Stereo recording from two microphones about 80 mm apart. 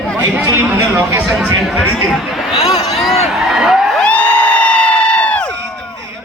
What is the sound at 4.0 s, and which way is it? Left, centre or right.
Crowd, centre.